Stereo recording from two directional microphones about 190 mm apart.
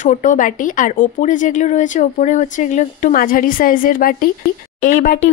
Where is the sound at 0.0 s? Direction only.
40° left (ahead or behind).